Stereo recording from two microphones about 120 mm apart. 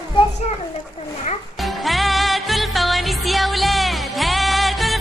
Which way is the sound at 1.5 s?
Centre (ahead or behind).